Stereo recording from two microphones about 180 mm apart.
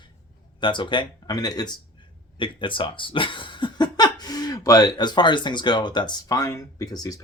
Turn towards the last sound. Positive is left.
turn(degrees=20)  # may be behind; listen again after turning